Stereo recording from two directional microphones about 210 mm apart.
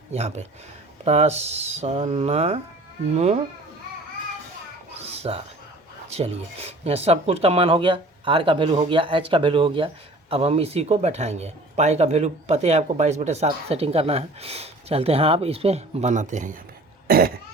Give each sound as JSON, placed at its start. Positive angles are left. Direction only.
{"t": 0.1, "sound": "speech", "side_deg": -30}
{"t": 4.9, "sound": "a sound", "side_deg": -30}
{"t": 6.1, "sound": "speech", "side_deg": -30}
{"t": 17.1, "sound": "cough", "side_deg": -45}